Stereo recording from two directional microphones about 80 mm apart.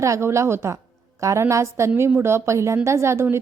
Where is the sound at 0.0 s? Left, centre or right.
Right.